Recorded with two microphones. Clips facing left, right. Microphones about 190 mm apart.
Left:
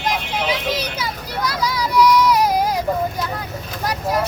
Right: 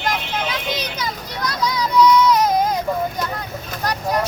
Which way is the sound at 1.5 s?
10° left (ahead or behind).